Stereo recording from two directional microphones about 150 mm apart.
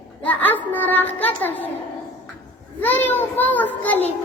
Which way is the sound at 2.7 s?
10° left (ahead or behind).